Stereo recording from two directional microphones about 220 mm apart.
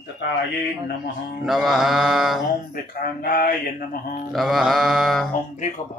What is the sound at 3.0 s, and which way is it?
Speech, 40° left (ahead or behind).